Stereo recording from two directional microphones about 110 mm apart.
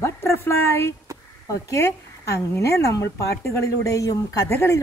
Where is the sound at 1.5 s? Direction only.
25° left (ahead or behind).